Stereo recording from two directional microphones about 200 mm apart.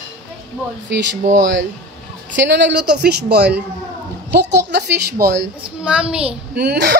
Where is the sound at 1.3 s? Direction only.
65° right (ahead or behind).